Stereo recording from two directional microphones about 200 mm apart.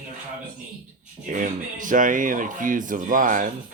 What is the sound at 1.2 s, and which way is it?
Speech, 40° right (ahead or behind).